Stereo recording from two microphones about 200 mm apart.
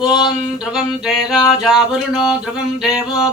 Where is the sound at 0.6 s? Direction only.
5° right (ahead or behind).